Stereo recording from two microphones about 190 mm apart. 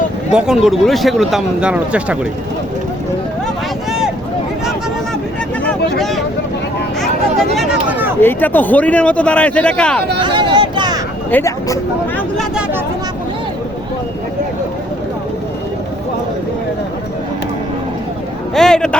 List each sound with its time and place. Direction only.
0.3 s speech: 5° right (ahead or behind)
6.0 s vehicle: centre (ahead or behind)
7.0 s a sound: centre (ahead or behind)
8.2 s speech: 10° left (ahead or behind)
10.2 s a sound: 25° right (ahead or behind)
11.3 s speech: 15° left (ahead or behind)
12.4 s chatter: 5° right (ahead or behind)
18.5 s speech: 5° left (ahead or behind)